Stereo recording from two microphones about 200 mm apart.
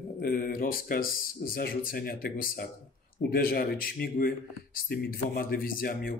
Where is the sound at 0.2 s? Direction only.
45° left (ahead or behind).